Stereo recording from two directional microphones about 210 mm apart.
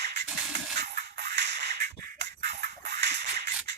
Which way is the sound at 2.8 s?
55° right (ahead or behind).